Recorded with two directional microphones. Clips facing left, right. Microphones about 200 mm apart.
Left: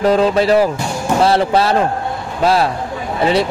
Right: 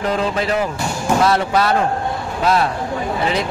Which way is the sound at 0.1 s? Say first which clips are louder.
Left 6 dB; 35° left (ahead or behind).